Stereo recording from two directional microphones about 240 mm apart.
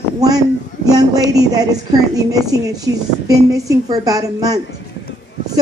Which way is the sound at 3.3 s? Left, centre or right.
Centre.